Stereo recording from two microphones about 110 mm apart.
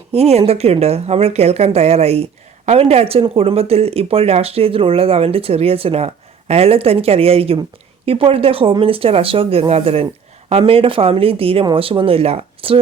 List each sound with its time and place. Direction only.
0.1 s speech: 70° right (ahead or behind)